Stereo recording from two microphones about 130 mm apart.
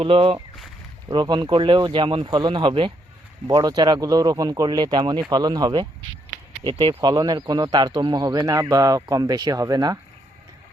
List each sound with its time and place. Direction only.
0.0 s speech: 45° right (ahead or behind)
1.0 s speech: 30° right (ahead or behind)
3.4 s speech: 30° right (ahead or behind)